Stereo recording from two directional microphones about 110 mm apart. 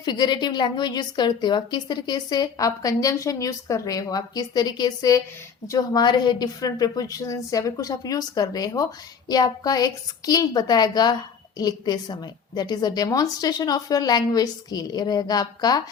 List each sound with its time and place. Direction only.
0.0 s a woman's voice: 40° left (ahead or behind)